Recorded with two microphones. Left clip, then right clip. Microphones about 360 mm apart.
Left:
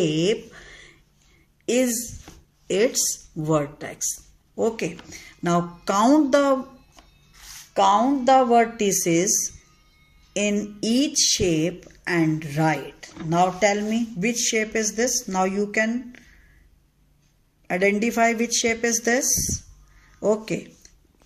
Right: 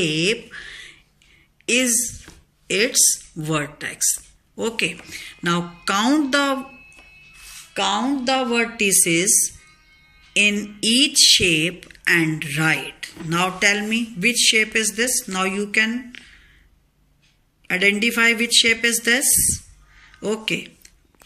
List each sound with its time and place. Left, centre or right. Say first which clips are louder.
0.0 s a sound: right 1 dB; centre
1.7 s speech: right 3 dB; centre
7.7 s speech: left 3 dB; centre
17.6 s speech: right 3 dB; centre